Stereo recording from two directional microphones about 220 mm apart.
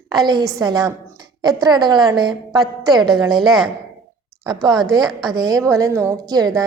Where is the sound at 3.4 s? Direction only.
Centre (ahead or behind).